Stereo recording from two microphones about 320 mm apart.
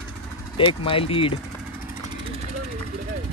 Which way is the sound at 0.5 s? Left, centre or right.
Centre.